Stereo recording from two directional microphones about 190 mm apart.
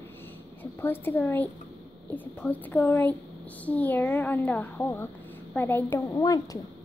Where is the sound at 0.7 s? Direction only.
10° left (ahead or behind).